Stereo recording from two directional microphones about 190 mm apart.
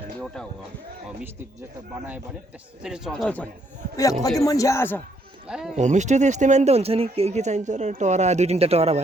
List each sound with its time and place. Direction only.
2.8 s speech: 5° right (ahead or behind)
4.4 s speech: 15° left (ahead or behind)
5.5 s speech: 5° right (ahead or behind)
5.7 s speech: 40° right (ahead or behind)